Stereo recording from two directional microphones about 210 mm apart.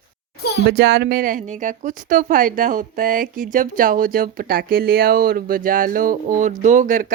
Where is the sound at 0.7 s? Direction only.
50° right (ahead or behind).